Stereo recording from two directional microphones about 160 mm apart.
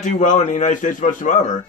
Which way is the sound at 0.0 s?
55° left (ahead or behind).